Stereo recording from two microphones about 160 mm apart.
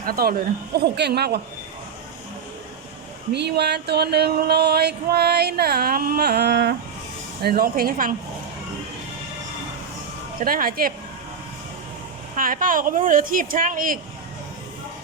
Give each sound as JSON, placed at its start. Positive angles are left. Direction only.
{"t": 0.0, "sound": "a woman's voice", "side_deg": -70}
{"t": 0.9, "sound": "a sound", "side_deg": -90}
{"t": 3.3, "sound": "a sound", "side_deg": -90}
{"t": 7.4, "sound": "a woman's voice", "side_deg": -70}
{"t": 10.4, "sound": "speech", "side_deg": -65}
{"t": 12.4, "sound": "speech", "side_deg": -60}